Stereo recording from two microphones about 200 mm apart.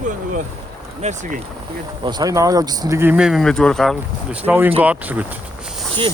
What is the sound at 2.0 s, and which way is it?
Speech, 20° right (ahead or behind).